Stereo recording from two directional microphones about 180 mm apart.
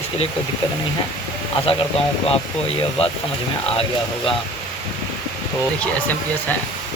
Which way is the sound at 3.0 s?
35° left (ahead or behind).